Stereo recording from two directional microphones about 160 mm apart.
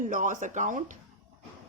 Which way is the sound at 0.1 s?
55° right (ahead or behind).